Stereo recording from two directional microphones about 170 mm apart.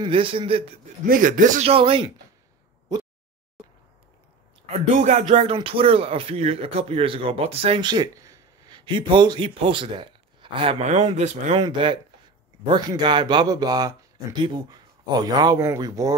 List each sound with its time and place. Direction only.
0.0 s speech: 30° right (ahead or behind)
1.0 s speech: 55° right (ahead or behind)
1.7 s speech: 30° right (ahead or behind)
4.6 s speech: 40° right (ahead or behind)
11.6 s speech: 30° right (ahead or behind)